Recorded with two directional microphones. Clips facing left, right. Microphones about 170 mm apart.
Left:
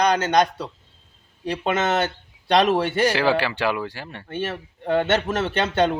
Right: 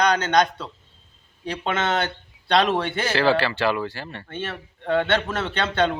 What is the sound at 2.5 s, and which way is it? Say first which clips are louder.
A man's voice: left 2 dB; 10° left (ahead or behind).